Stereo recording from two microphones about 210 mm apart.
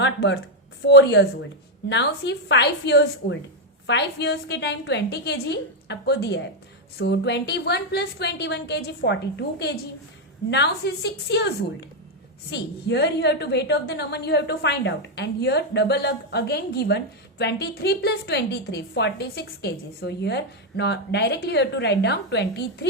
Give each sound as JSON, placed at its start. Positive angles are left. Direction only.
{"t": 0.0, "sound": "a woman's voice", "side_deg": 55}